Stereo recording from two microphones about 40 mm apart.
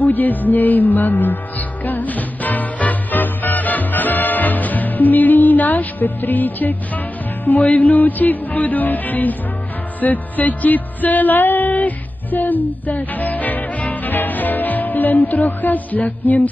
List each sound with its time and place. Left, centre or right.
0.0 s music: left